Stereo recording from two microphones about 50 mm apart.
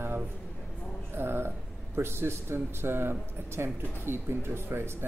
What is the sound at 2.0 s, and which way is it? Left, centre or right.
Speech, right.